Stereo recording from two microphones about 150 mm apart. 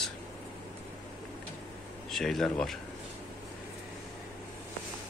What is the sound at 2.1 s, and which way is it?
Speech, centre (ahead or behind).